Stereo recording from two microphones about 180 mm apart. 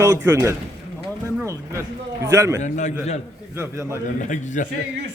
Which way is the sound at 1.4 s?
15° right (ahead or behind).